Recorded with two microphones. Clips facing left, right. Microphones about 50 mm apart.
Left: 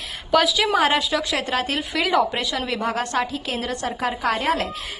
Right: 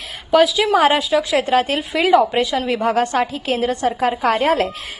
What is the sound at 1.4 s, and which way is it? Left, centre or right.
A woman's voice, right.